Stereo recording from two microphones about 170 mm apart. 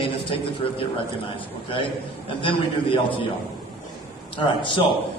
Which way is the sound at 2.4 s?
30° left (ahead or behind).